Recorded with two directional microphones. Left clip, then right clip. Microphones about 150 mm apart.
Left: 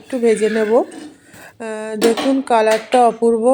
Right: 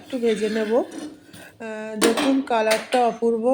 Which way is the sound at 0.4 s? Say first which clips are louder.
Left 7 dB; 25° left (ahead or behind).